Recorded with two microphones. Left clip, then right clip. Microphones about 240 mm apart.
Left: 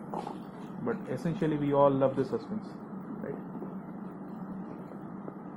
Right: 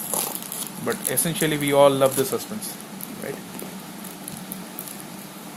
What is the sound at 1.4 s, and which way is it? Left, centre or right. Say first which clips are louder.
Speech: right 8 dB; right.